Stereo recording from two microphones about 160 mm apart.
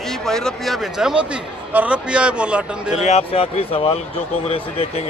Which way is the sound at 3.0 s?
40° left (ahead or behind).